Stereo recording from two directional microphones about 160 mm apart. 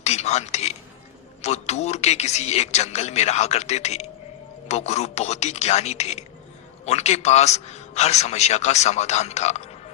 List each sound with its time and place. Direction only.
0.0 s a man's voice: 45° left (ahead or behind)